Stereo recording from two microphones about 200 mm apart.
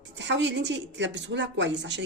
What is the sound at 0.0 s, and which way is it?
A woman's voice, 65° right (ahead or behind).